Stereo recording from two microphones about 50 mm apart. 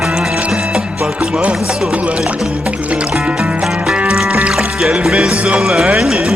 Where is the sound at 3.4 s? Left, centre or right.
Centre.